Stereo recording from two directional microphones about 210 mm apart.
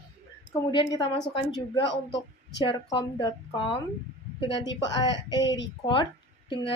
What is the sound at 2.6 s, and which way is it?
A woman's voice, 20° left (ahead or behind).